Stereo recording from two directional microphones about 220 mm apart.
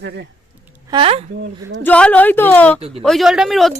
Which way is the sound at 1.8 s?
5° left (ahead or behind).